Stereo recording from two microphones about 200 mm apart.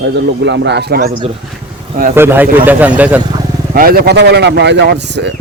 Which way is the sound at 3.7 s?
50° right (ahead or behind).